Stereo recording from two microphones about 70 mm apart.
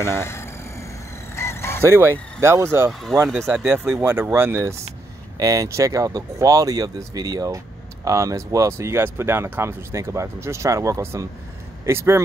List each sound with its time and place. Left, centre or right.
0.0 s vehicle: left
1.9 s speech: right
2.9 s speech: centre
3.5 s speech: centre
4.0 s speech: right
5.4 s speech: right